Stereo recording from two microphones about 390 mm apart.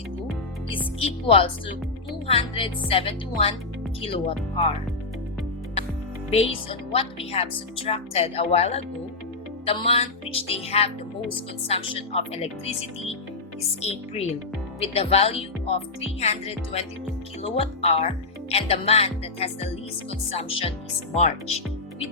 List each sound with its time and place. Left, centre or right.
0.7 s music: centre
2.2 s speech: centre
6.3 s speech: centre